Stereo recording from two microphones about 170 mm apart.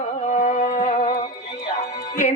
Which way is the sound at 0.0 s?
45° left (ahead or behind).